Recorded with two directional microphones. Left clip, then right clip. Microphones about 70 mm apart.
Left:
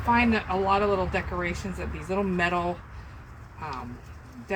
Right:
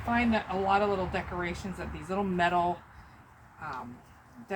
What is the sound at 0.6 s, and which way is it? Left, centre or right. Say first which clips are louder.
Speech: left 3 dB; right.